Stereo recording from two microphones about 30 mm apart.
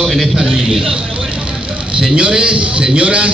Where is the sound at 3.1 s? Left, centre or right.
Right.